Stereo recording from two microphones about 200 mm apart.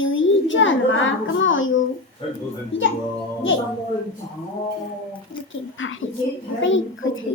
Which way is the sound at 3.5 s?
75° left (ahead or behind).